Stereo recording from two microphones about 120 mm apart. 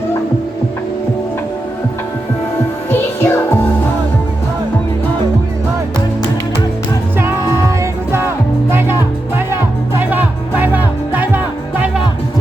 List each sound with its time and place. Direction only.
3.2 s music: 20° left (ahead or behind)
8.7 s music: 20° right (ahead or behind)